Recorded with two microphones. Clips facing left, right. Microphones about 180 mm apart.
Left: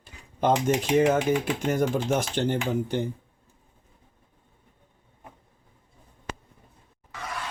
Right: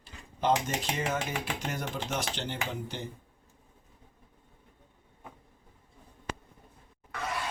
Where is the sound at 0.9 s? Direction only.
50° left (ahead or behind).